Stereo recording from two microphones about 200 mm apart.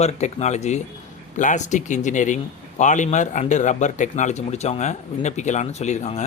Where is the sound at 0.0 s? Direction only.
35° left (ahead or behind).